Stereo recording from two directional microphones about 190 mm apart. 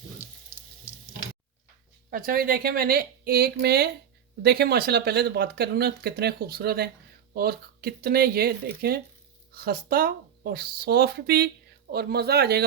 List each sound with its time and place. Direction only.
2.0 s speech: 50° right (ahead or behind)